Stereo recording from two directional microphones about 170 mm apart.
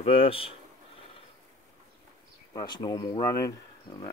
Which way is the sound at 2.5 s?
25° left (ahead or behind).